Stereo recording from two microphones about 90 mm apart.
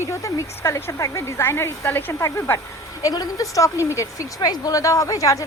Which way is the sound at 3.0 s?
40° left (ahead or behind).